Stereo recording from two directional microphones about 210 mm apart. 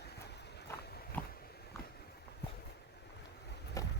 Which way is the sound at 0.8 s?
50° left (ahead or behind).